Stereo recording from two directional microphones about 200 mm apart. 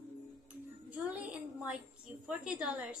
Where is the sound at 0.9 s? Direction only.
5° right (ahead or behind).